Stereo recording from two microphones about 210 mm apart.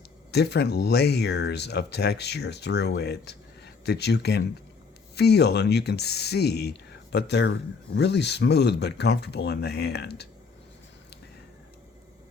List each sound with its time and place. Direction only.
0.3 s speech: 50° left (ahead or behind)